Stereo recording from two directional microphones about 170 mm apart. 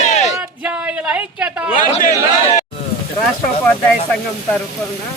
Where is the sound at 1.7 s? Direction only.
50° left (ahead or behind).